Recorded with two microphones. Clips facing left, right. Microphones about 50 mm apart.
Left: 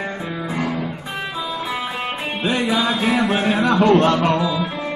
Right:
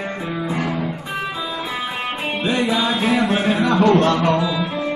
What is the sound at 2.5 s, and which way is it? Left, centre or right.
Music, left.